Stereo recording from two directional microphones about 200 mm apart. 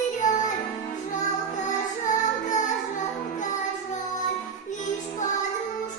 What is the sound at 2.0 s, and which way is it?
Music, 40° left (ahead or behind).